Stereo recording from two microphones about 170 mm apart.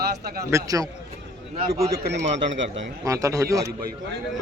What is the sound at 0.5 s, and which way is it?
Speech, 20° right (ahead or behind).